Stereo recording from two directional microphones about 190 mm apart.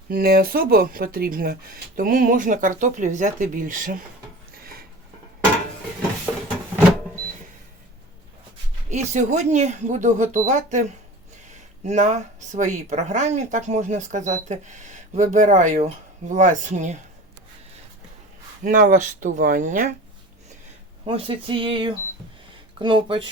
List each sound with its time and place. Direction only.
0.1 s speech: 55° right (ahead or behind)
8.9 s speech: 35° right (ahead or behind)
18.6 s speech: 45° right (ahead or behind)
21.0 s speech: 30° right (ahead or behind)